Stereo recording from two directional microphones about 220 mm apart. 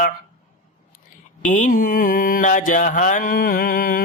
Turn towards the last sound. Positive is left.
turn(degrees=40)  # may be behind; listen again after turning